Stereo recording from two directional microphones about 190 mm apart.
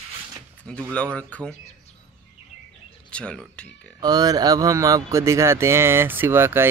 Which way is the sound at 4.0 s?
20° right (ahead or behind).